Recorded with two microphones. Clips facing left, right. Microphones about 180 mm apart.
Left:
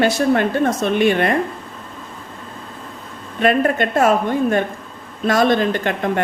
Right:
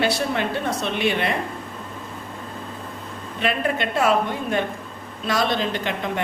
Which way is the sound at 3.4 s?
45° left (ahead or behind).